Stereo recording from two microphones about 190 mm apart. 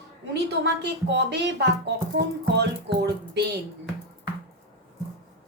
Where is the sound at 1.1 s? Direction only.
60° right (ahead or behind).